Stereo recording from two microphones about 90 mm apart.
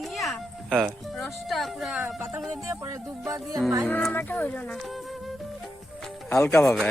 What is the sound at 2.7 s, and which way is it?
Music, 35° right (ahead or behind).